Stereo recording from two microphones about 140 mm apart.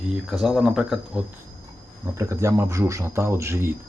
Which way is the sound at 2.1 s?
20° right (ahead or behind).